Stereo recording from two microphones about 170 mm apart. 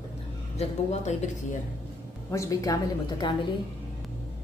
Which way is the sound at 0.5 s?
40° left (ahead or behind).